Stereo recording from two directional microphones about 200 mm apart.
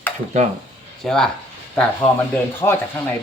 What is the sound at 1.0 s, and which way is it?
Speech, 5° left (ahead or behind).